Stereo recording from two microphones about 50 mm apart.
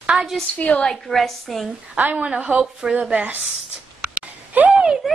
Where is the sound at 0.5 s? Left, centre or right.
Left.